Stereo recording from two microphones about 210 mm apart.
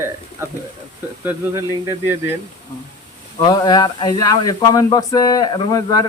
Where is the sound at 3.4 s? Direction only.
20° left (ahead or behind).